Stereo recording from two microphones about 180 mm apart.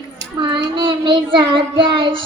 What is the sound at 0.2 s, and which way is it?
Child singing, 25° right (ahead or behind).